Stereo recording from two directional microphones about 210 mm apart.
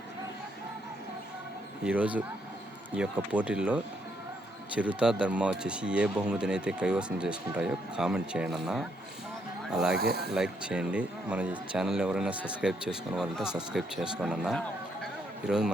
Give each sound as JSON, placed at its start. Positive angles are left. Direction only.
{"t": 1.8, "sound": "speech", "side_deg": -5}
{"t": 10.0, "sound": "speech", "side_deg": -50}
{"t": 10.2, "sound": "speech", "side_deg": -5}